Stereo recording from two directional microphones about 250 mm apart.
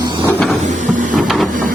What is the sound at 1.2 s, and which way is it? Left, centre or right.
Printer, centre.